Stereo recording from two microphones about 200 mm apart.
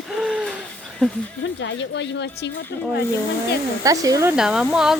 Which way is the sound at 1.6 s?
65° left (ahead or behind).